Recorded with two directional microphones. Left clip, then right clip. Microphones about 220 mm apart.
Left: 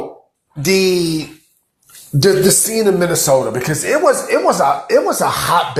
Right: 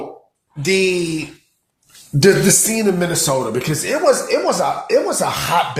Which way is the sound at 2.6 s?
10° left (ahead or behind).